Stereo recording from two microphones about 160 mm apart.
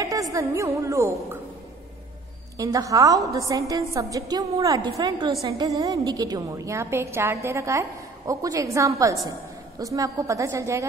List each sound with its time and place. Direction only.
0.0 s a woman's voice: 20° right (ahead or behind)
2.5 s a woman's voice: 20° right (ahead or behind)